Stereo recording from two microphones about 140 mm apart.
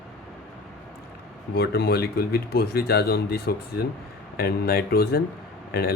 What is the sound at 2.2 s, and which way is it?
Speech, 90° left.